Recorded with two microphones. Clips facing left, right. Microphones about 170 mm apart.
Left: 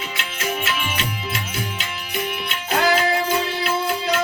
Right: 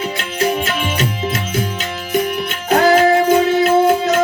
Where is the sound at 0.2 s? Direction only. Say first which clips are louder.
Right 8 dB; 40° right (ahead or behind).